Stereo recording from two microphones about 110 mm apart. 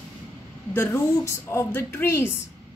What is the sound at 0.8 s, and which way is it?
Speech, 25° left (ahead or behind).